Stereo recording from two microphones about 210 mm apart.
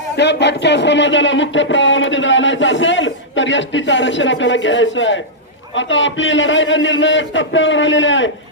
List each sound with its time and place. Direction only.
0.2 s speech: 55° left (ahead or behind)